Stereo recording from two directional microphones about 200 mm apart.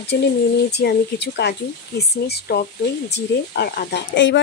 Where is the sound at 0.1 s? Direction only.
55° left (ahead or behind).